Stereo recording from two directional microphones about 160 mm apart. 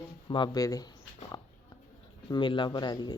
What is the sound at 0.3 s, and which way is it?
Speech, 30° left (ahead or behind).